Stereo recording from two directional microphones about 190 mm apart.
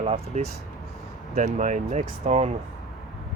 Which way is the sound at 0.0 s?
35° right (ahead or behind).